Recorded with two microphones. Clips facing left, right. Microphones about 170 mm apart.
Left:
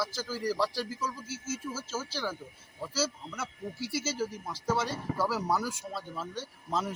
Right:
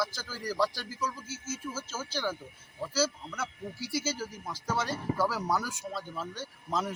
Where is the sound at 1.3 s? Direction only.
30° left (ahead or behind).